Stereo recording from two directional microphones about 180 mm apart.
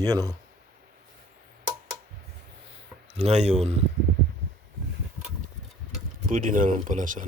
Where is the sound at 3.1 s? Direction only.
40° right (ahead or behind).